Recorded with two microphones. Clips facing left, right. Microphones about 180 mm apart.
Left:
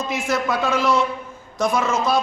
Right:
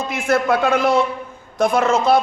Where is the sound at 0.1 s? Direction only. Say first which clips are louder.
Right 6 dB; 55° right (ahead or behind).